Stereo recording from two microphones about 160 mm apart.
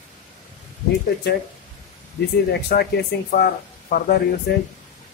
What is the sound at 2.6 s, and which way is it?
Speech, 80° left.